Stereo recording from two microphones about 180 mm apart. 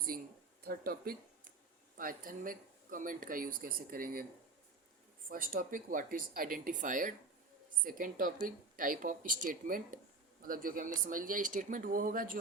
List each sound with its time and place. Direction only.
0.6 s speech: 55° right (ahead or behind)
5.3 s speech: 50° right (ahead or behind)